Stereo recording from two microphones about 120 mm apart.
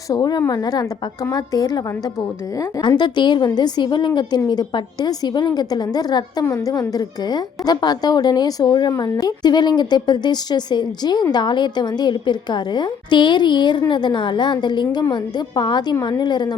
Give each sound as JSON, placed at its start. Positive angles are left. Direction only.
{"t": 0.1, "sound": "a woman's voice", "side_deg": 35}
{"t": 2.8, "sound": "a woman's voice", "side_deg": 40}